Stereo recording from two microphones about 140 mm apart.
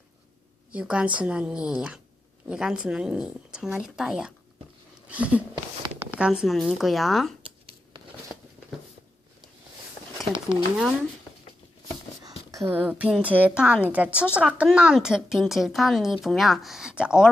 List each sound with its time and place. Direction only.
0.7 s a woman's voice: 5° right (ahead or behind)
10.5 s a woman's voice: 5° right (ahead or behind)
12.2 s a sound: 25° right (ahead or behind)
12.7 s a woman's voice: 10° right (ahead or behind)